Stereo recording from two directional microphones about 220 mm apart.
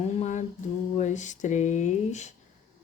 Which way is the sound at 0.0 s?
30° left (ahead or behind).